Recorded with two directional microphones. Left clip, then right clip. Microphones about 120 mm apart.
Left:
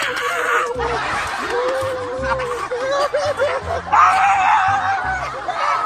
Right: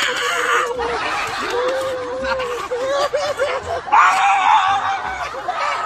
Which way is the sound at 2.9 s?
30° right (ahead or behind).